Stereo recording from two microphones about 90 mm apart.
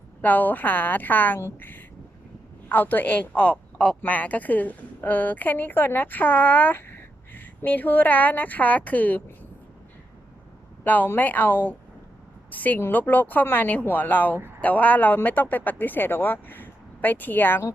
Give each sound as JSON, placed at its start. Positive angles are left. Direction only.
{"t": 0.2, "sound": "speech", "side_deg": 20}
{"t": 10.8, "sound": "speech", "side_deg": 20}